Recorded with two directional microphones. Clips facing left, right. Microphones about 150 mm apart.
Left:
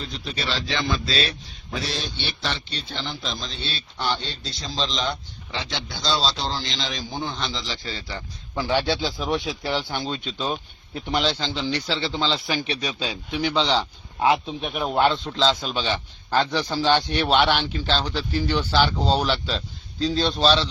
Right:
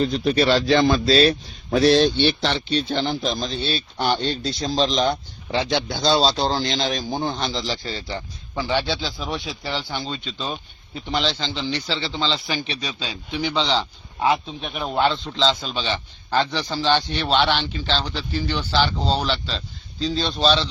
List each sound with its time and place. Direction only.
0.0 s speech: 55° right (ahead or behind); by 1.4 s 40° right (ahead or behind)
1.7 s a man's voice: 70° right (ahead or behind)
2.9 s a man's voice: 55° right (ahead or behind); by 8.2 s 30° right (ahead or behind)
8.5 s a man's voice: 5° left (ahead or behind)